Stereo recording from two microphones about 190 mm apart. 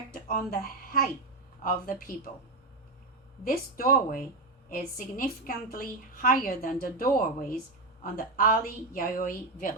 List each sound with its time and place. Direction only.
0.1 s a woman's voice: 50° left (ahead or behind)
3.4 s a woman's voice: 45° left (ahead or behind)